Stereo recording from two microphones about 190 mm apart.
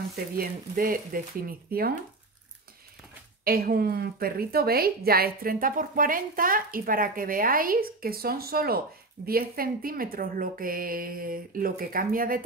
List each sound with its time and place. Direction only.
0.4 s a woman's voice: 50° right (ahead or behind)
3.4 s a woman's voice: 50° right (ahead or behind)